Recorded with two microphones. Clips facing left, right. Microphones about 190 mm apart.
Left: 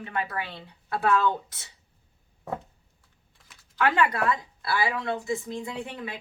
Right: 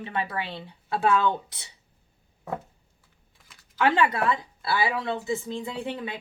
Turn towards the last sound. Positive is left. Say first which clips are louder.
# right 3 dB
turn(degrees=-30)  # may be behind; listen again after turning